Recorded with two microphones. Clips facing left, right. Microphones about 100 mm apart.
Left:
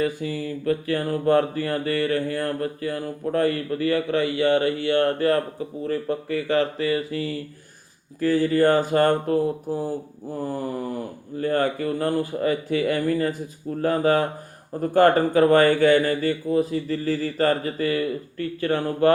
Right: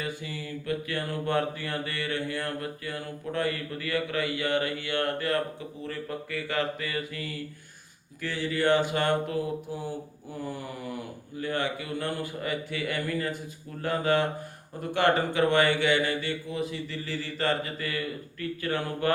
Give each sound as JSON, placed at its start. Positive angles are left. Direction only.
{"t": 0.0, "sound": "mantra", "side_deg": 40}